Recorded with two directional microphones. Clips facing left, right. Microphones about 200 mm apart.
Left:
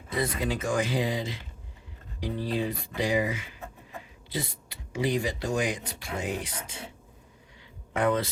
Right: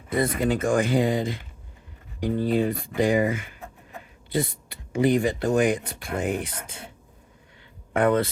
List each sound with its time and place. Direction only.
0.1 s speech: 55° right (ahead or behind)
7.9 s speech: 55° right (ahead or behind)